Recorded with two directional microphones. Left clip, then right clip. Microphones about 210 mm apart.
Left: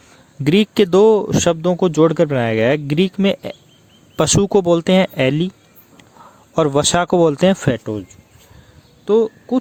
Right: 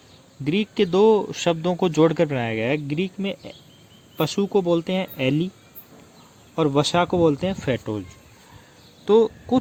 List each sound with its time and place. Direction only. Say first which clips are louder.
0.4 s a man's voice: left 8 dB; 45° left (ahead or behind)
6.6 s speech: left 5 dB; 50° left (ahead or behind)
9.0 s speech: left 2 dB; 15° left (ahead or behind)